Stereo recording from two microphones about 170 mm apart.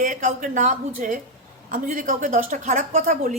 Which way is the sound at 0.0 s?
45° right (ahead or behind).